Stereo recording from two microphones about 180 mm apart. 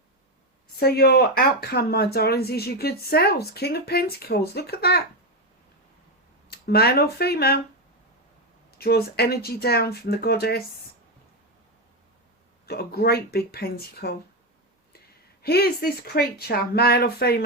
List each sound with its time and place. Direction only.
0.8 s speech: 60° left (ahead or behind)
6.5 s speech: 60° left (ahead or behind)
8.7 s speech: 60° left (ahead or behind)
12.6 s speech: 60° left (ahead or behind)